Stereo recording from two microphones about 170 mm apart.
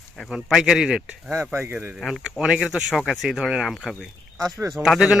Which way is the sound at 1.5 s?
15° right (ahead or behind).